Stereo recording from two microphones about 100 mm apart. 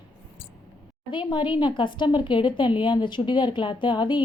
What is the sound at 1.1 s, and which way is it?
A woman's voice, 50° left (ahead or behind).